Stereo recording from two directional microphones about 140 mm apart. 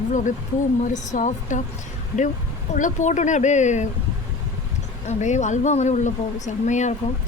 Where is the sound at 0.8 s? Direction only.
60° left (ahead or behind).